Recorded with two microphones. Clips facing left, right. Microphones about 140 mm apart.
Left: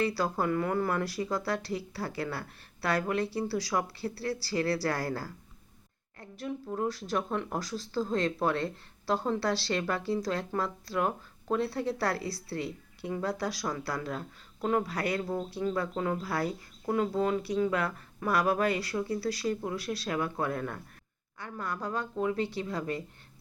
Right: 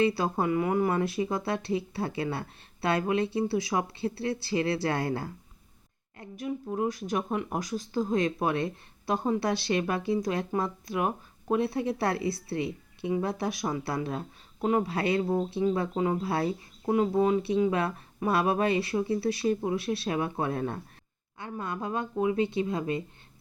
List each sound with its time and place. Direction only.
0.0 s speech: 20° right (ahead or behind)